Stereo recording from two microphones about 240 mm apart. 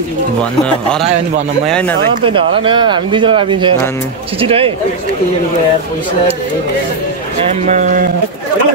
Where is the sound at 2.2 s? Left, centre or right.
Right.